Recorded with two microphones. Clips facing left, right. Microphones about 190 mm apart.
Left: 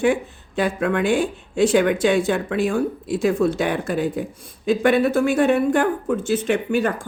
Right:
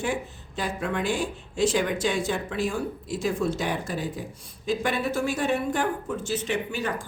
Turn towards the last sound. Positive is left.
turn(degrees=55)  # may be behind; listen again after turning